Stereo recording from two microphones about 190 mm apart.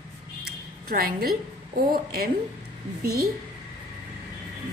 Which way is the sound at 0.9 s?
50° right (ahead or behind).